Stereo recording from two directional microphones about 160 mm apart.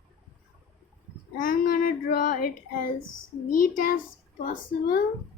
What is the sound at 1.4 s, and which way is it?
A woman's voice, 65° left (ahead or behind).